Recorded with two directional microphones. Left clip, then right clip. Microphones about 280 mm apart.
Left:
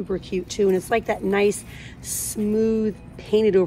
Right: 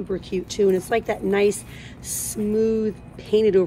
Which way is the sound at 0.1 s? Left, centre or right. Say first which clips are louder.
Even; centre.